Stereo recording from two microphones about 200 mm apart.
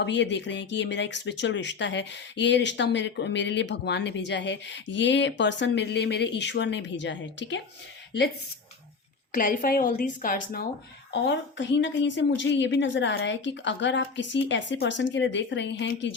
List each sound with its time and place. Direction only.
0.0 s speech: 60° left (ahead or behind)
9.3 s a woman's voice: 45° left (ahead or behind)
11.1 s speech: 60° left (ahead or behind)